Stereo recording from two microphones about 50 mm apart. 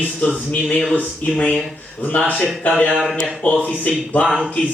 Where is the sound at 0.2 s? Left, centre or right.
Left.